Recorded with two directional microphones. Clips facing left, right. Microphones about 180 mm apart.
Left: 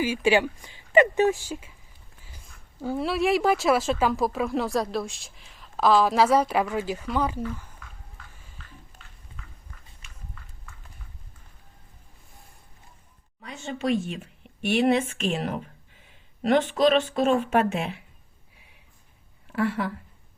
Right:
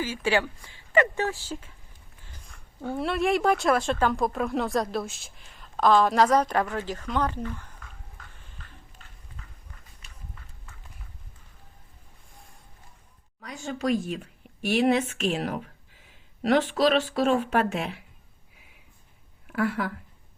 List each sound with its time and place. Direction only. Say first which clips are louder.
0.0 s speech: left 4 dB; 15° left (ahead or behind)
2.8 s speech: left 1 dB; centre (ahead or behind)
10.0 s a sound: even; 35° right (ahead or behind)
13.4 s speech: even; centre (ahead or behind)
19.5 s a woman's voice: left 1 dB; centre (ahead or behind)